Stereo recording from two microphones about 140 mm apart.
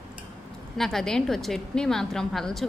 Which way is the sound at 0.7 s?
5° left (ahead or behind).